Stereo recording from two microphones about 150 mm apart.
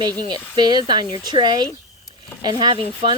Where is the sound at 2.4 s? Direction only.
30° right (ahead or behind).